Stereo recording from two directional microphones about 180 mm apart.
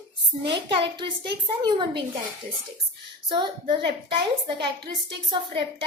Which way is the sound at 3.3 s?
25° right (ahead or behind).